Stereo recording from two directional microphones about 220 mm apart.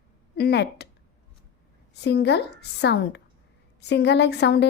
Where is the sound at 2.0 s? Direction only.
50° left (ahead or behind).